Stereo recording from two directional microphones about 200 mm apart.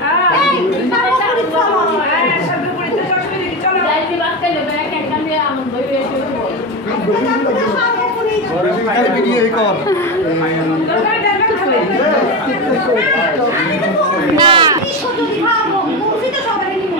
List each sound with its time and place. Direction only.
14.3 s speech: 25° right (ahead or behind)